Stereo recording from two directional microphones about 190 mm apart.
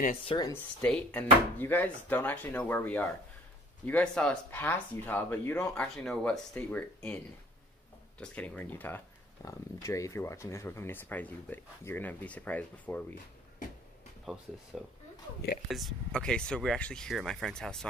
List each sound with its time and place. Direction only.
0.2 s speech: 30° left (ahead or behind)
0.7 s speech: 5° left (ahead or behind)
8.2 s speech: 10° left (ahead or behind)
14.3 s speech: 5° right (ahead or behind)